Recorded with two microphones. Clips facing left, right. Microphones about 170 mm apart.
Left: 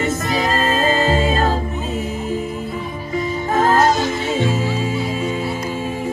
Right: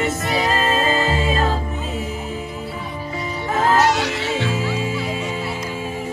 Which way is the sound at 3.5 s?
40° left (ahead or behind).